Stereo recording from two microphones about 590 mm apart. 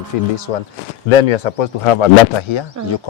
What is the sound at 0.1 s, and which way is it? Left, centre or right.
Speech, left.